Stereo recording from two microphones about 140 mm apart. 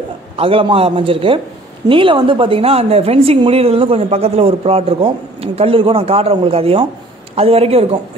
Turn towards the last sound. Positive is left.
turn(degrees=-45)  # may be behind; listen again after turning